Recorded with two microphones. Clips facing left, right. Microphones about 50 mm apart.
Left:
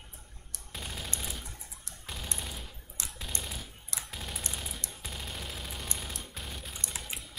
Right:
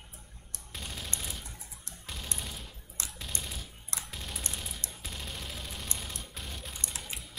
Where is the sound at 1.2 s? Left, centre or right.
Centre.